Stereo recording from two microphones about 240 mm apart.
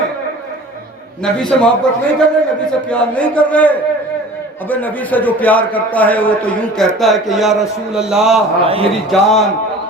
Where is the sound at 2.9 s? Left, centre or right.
Centre.